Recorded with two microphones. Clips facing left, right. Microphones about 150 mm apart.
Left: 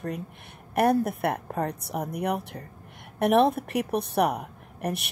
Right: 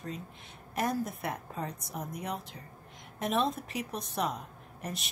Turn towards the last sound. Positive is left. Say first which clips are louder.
# left 9 dB
turn(degrees=65)  # may be behind; listen again after turning